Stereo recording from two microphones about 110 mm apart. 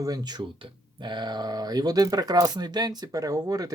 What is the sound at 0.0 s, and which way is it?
Speech, 35° right (ahead or behind).